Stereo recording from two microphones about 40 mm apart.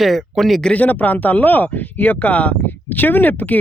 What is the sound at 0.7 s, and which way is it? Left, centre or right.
Speech, left.